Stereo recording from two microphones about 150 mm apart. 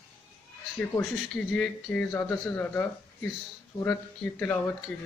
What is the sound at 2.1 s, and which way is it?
Speech, 15° left (ahead or behind).